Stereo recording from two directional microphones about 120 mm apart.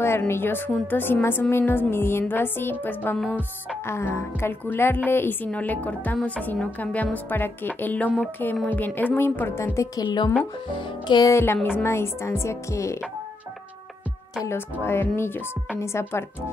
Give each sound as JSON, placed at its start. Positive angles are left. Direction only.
{"t": 0.3, "sound": "speech", "side_deg": 20}
{"t": 10.0, "sound": "speech", "side_deg": 35}
{"t": 11.3, "sound": "a woman's voice", "side_deg": 20}
{"t": 14.4, "sound": "a woman's voice", "side_deg": 20}